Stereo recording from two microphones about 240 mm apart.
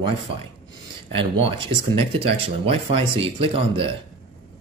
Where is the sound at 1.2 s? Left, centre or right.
Right.